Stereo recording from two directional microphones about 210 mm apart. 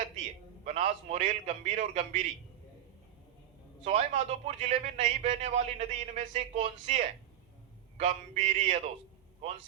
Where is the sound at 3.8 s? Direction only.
35° right (ahead or behind).